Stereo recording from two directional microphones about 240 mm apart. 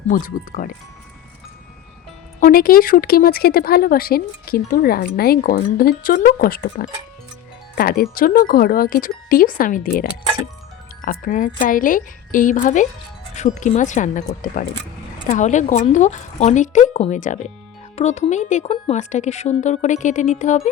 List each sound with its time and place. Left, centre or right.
0.1 s speech: left
2.4 s speech: left